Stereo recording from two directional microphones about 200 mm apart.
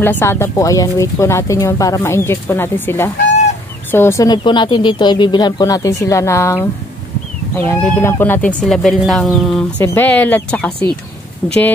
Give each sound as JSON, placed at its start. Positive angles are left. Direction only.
{"t": 0.0, "sound": "speech", "side_deg": 10}